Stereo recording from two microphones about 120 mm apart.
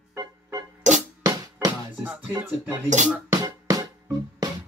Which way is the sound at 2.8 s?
80° right.